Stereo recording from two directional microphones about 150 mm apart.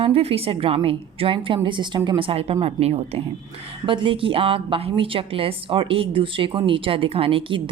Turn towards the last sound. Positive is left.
turn(degrees=-35)  # may be behind; listen again after turning